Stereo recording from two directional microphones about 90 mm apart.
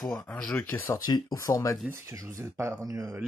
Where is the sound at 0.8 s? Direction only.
45° left (ahead or behind).